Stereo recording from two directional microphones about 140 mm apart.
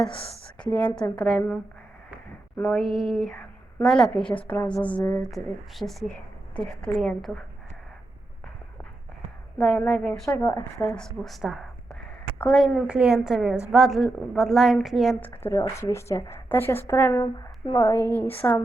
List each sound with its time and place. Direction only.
0.6 s a woman's voice: 10° left (ahead or behind)
1.3 s a woman's voice: 5° right (ahead or behind)
2.6 s a woman's voice: centre (ahead or behind)
9.6 s a woman's voice: 5° left (ahead or behind)
10.2 s speech: 20° left (ahead or behind)
10.8 s a woman's voice: 5° left (ahead or behind)
15.2 s a woman's voice: 15° left (ahead or behind)